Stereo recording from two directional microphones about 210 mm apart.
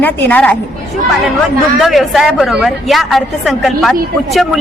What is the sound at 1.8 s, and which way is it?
A woman's voice, centre (ahead or behind).